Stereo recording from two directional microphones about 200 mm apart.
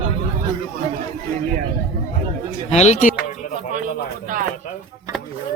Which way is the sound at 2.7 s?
35° left (ahead or behind).